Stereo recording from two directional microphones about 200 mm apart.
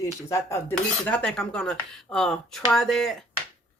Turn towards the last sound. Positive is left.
turn(degrees=0)  # may be behind; listen again after turning